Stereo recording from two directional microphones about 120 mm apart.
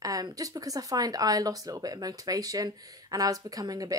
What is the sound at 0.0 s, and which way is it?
Speech, 30° right (ahead or behind).